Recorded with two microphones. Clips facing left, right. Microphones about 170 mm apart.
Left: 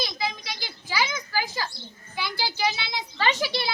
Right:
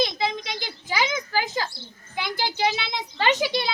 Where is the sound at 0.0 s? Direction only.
20° right (ahead or behind).